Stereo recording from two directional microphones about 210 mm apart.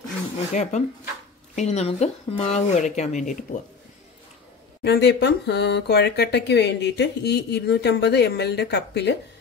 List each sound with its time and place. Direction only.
0.5 s speech: 35° left (ahead or behind)
4.8 s speech: 50° left (ahead or behind)